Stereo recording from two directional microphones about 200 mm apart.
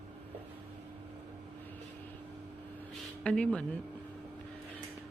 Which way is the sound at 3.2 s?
5° left (ahead or behind).